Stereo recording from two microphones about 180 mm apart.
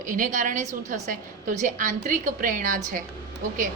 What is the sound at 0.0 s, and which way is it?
A woman's voice, 45° right (ahead or behind).